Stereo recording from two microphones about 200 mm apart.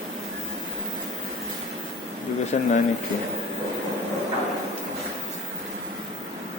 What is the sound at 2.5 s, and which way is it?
Speech, 30° left (ahead or behind).